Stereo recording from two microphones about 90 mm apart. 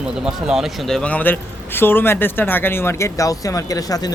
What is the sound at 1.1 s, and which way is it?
A man's voice, 20° left (ahead or behind).